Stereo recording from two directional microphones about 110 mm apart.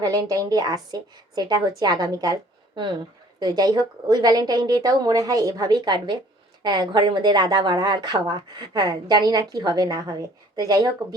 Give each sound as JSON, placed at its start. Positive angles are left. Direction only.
{"t": 0.0, "sound": "a woman's voice", "side_deg": -35}